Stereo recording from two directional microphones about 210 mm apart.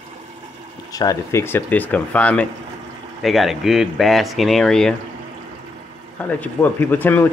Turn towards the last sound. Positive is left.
turn(degrees=10)  # may be behind; listen again after turning